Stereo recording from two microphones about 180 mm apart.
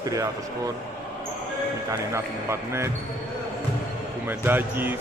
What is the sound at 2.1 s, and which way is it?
Speech, 15° right (ahead or behind).